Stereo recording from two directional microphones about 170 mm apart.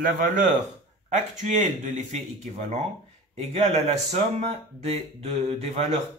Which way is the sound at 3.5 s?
40° right (ahead or behind).